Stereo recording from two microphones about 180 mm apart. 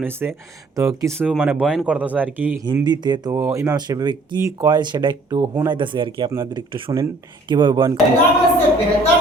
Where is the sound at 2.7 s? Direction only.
25° right (ahead or behind).